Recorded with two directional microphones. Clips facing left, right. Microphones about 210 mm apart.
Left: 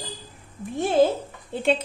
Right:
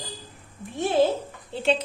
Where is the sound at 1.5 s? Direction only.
50° left (ahead or behind).